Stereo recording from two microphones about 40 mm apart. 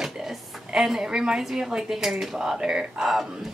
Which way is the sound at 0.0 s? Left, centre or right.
Centre.